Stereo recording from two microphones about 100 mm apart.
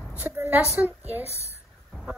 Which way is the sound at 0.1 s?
20° right (ahead or behind).